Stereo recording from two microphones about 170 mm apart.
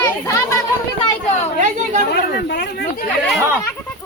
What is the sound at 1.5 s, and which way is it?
Chatter, 45° right (ahead or behind).